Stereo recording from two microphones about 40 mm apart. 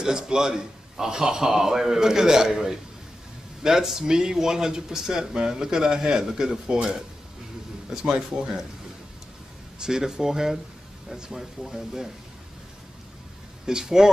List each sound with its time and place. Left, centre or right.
0.0 s speech: centre
9.8 s speech: centre
13.7 s speech: centre